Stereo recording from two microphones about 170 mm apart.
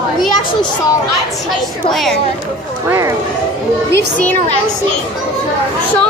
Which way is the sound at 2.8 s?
15° right (ahead or behind).